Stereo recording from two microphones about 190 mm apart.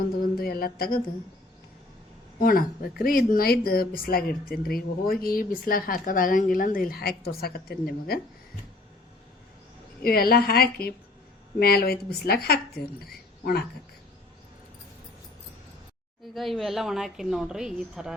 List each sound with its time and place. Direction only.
0.2 s speech: 50° left (ahead or behind)
2.4 s speech: 50° left (ahead or behind)
10.0 s speech: 50° left (ahead or behind)
16.3 s a woman's voice: centre (ahead or behind)